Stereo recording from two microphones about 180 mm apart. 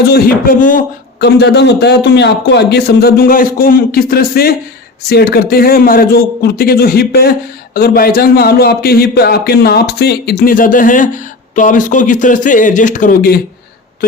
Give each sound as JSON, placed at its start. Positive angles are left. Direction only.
{"t": 0.0, "sound": "a man's voice", "side_deg": 55}
{"t": 1.2, "sound": "a man's voice", "side_deg": 70}